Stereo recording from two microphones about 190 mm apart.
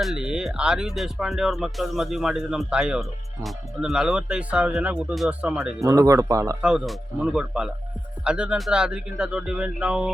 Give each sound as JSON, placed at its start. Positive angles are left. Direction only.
{"t": 0.0, "sound": "speech", "side_deg": -5}
{"t": 5.8, "sound": "speech", "side_deg": -15}
{"t": 6.6, "sound": "speech", "side_deg": -5}